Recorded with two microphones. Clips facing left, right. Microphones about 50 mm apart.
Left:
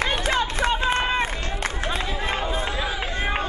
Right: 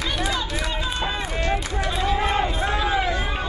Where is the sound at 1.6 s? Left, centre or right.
Left.